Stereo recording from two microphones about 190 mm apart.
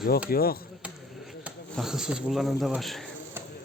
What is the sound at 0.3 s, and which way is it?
Speech, 50° left (ahead or behind).